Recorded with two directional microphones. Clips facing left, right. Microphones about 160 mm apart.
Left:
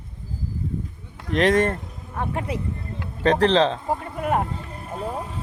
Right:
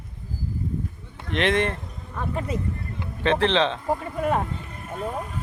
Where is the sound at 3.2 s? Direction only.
40° left (ahead or behind).